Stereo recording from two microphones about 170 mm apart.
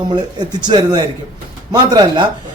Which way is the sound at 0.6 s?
25° right (ahead or behind).